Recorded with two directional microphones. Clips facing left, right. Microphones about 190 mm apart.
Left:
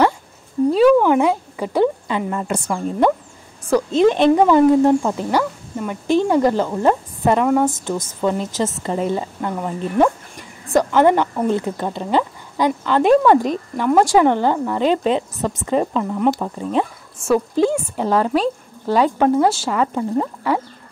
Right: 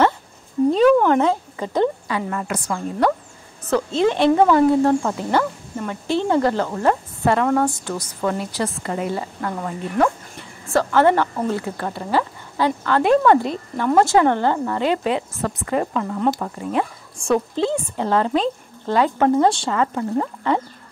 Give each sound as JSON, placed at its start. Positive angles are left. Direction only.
{"t": 0.7, "sound": "a sound", "side_deg": 5}
{"t": 2.0, "sound": "a woman's voice", "side_deg": 20}
{"t": 5.4, "sound": "a sound", "side_deg": 5}
{"t": 6.0, "sound": "a woman's voice", "side_deg": 15}
{"t": 8.8, "sound": "a woman's voice", "side_deg": 30}
{"t": 9.1, "sound": "a woman's voice", "side_deg": 20}